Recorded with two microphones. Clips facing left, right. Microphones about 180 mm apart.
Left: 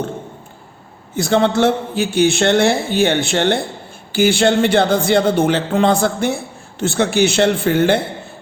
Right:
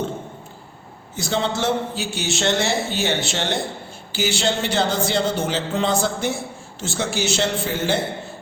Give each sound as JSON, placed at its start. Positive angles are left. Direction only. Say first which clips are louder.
{"t": 1.1, "sound": "a man's voice", "louder": "left 8 dB", "side_deg": 55}